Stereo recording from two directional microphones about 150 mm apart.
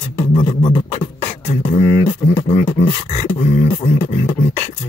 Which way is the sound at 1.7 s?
40° left (ahead or behind).